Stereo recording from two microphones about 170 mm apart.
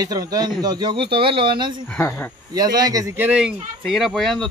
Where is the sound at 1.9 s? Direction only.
10° left (ahead or behind).